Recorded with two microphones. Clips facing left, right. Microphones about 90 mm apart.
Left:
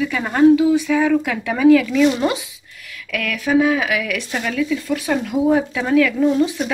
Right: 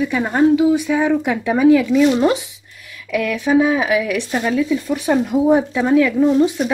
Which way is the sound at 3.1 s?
20° right (ahead or behind).